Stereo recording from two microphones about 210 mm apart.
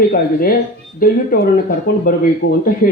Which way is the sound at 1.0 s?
45° left (ahead or behind).